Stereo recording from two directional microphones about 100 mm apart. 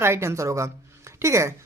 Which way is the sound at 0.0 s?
25° right (ahead or behind).